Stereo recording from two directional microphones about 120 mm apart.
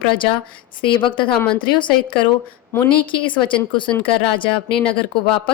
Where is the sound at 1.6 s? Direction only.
40° left (ahead or behind).